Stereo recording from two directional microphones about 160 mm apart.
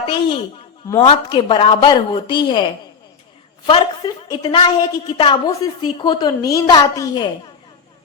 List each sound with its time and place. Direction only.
0.0 s a woman's voice: 30° left (ahead or behind)
3.7 s a woman's voice: 30° left (ahead or behind)